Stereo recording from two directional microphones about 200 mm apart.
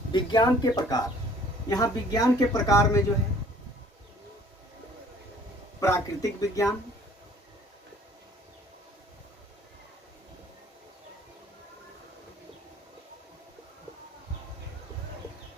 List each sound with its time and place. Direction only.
0.1 s speech: 20° left (ahead or behind)
5.8 s speech: 15° left (ahead or behind)